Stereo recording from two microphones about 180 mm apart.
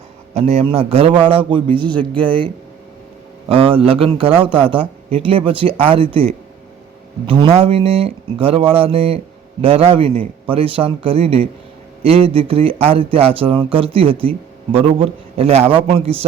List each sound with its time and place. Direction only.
0.3 s speech: 35° right (ahead or behind)
1.8 s speech: 5° left (ahead or behind)
3.5 s a man's voice: 30° right (ahead or behind)